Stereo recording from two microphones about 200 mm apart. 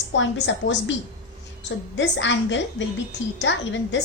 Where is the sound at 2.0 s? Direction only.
65° left (ahead or behind).